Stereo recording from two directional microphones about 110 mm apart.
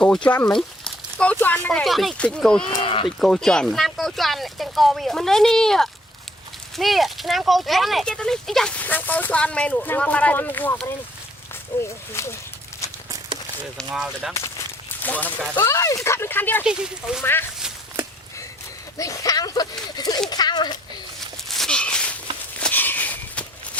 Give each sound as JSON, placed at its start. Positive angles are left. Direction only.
{"t": 0.5, "sound": "speech", "side_deg": 10}
{"t": 1.8, "sound": "speech", "side_deg": 0}
{"t": 2.8, "sound": "speech", "side_deg": 50}
{"t": 3.2, "sound": "speech", "side_deg": 5}
{"t": 11.8, "sound": "speech", "side_deg": 25}
{"t": 13.9, "sound": "speech", "side_deg": -5}
{"t": 14.3, "sound": "a sound", "side_deg": 25}
{"t": 15.0, "sound": "speech", "side_deg": 15}
{"t": 16.6, "sound": "speech", "side_deg": -5}
{"t": 18.9, "sound": "speech", "side_deg": 30}
{"t": 20.0, "sound": "a sound", "side_deg": 35}
{"t": 21.5, "sound": "a sound", "side_deg": 5}
{"t": 22.6, "sound": "walk", "side_deg": 15}